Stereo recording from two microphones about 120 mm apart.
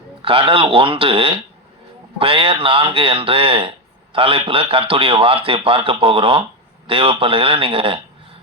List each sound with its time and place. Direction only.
0.2 s speech: 50° right (ahead or behind)